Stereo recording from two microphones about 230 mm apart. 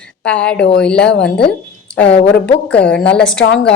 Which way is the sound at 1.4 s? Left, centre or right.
Left.